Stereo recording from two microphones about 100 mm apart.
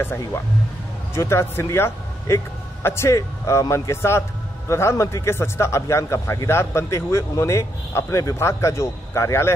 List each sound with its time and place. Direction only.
0.0 s a man's voice: 20° left (ahead or behind)